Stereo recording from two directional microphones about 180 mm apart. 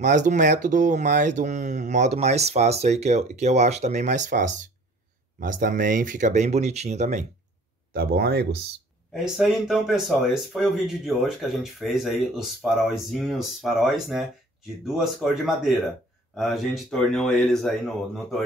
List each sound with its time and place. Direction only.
0.0 s speech: 40° right (ahead or behind)
7.9 s speech: 60° right (ahead or behind)
9.1 s speech: centre (ahead or behind)